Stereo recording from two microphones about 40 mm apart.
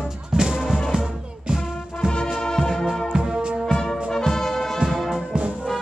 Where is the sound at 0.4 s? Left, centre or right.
Centre.